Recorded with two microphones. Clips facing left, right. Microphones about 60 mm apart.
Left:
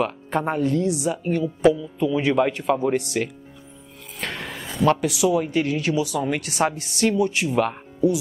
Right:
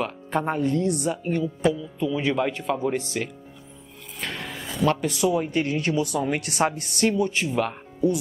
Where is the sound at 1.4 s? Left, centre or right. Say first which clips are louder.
Left 8 dB; centre.